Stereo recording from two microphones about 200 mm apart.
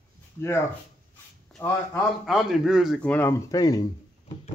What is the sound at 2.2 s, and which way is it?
Speech, centre (ahead or behind).